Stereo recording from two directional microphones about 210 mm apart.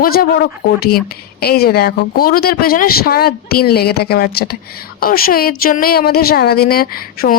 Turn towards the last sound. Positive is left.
turn(degrees=45)  # may be behind; listen again after turning